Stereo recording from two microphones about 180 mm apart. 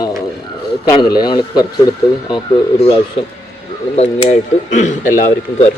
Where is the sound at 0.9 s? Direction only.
20° left (ahead or behind).